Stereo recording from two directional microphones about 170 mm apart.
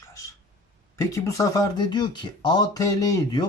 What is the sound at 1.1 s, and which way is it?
Speech, 20° left (ahead or behind).